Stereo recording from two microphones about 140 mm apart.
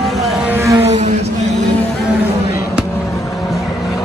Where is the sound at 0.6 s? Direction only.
20° right (ahead or behind).